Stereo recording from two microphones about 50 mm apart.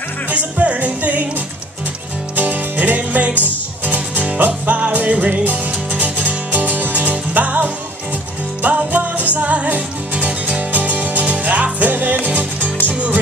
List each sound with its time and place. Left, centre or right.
0.3 s music: right
2.3 s music: right